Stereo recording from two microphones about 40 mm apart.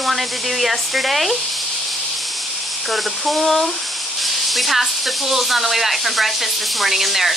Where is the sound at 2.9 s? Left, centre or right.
Centre.